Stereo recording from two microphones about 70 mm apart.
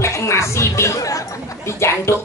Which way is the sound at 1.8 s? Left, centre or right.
Left.